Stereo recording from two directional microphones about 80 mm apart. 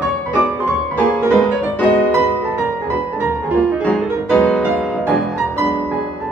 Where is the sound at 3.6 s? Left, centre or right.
Centre.